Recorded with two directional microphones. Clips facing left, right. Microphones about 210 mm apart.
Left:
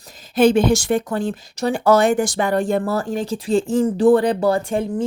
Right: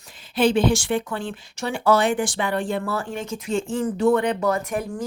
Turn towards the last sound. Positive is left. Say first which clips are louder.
# left 5 dB
turn(degrees=30)  # may be behind; listen again after turning